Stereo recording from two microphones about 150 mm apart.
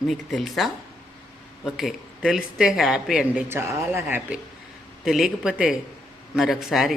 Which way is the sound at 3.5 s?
15° right (ahead or behind).